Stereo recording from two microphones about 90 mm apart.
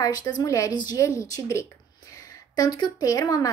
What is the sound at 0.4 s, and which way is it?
A woman's voice, 40° left (ahead or behind).